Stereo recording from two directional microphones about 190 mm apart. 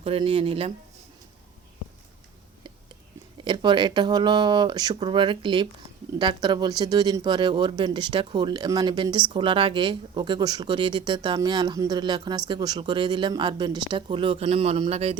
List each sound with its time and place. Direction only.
0.0 s speech: 30° right (ahead or behind)
3.4 s speech: 25° right (ahead or behind)